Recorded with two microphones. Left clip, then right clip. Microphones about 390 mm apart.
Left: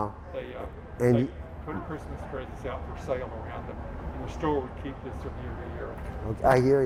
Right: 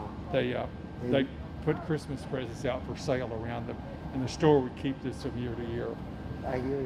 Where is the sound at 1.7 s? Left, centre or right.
Right.